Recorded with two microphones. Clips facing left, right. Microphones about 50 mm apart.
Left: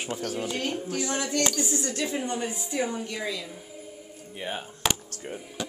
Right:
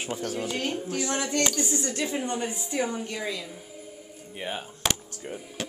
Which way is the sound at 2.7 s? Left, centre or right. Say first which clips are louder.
Even; right.